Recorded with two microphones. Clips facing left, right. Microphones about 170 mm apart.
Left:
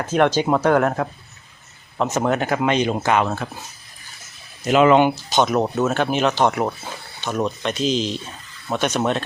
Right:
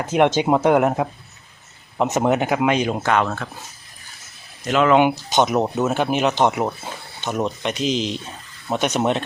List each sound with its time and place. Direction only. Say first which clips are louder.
0.0 s speech: right 1 dB; 15° right (ahead or behind)
3.1 s speech: right 1 dB; 10° left (ahead or behind)
4.6 s speech: left 3 dB; 10° left (ahead or behind)
4.9 s speech: even; 15° right (ahead or behind)
6.5 s speech: even; 5° right (ahead or behind)
6.8 s speech: right 1 dB; 20° right (ahead or behind)